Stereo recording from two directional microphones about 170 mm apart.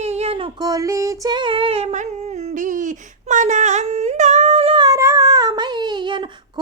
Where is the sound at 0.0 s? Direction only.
40° right (ahead or behind).